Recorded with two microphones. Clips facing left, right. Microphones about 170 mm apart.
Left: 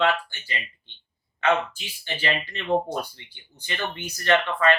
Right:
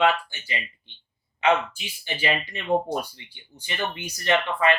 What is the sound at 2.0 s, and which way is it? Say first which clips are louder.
Speech: right 1 dB; 15° right (ahead or behind).